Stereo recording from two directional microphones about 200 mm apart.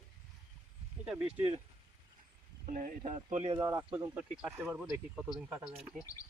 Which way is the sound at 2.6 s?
40° right (ahead or behind).